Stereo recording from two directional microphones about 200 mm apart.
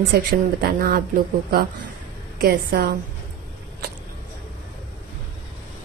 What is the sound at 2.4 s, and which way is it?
Speech, 50° right (ahead or behind).